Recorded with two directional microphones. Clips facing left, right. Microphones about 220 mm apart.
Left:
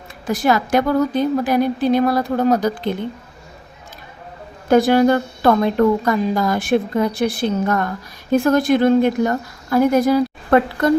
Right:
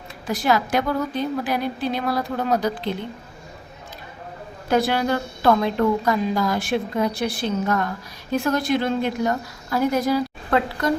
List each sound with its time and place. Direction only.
0.3 s a woman's voice: 50° left (ahead or behind)
4.7 s a woman's voice: 45° left (ahead or behind)